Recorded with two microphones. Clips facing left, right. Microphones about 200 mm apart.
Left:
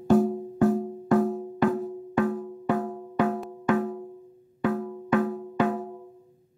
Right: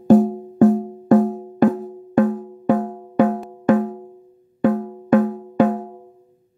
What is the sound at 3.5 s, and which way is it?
Music, 45° right (ahead or behind).